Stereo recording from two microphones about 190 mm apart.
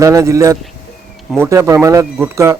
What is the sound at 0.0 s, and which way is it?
Speech, 15° right (ahead or behind).